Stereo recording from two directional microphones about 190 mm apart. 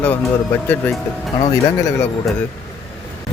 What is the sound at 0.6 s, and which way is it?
Speech, 10° left (ahead or behind).